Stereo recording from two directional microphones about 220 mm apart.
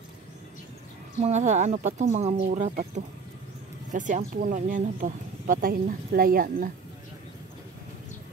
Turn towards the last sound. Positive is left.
turn(degrees=-40)  # may be behind; listen again after turning